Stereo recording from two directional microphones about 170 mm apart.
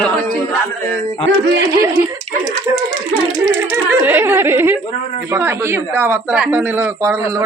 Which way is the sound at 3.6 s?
15° right (ahead or behind).